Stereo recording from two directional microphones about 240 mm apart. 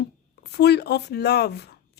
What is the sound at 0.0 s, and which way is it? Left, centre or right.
Speech, left.